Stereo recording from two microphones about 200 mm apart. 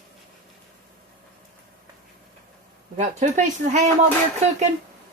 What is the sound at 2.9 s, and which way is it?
Speech, 35° right (ahead or behind).